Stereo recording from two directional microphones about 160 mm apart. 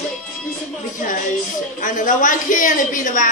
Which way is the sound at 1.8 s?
55° left (ahead or behind).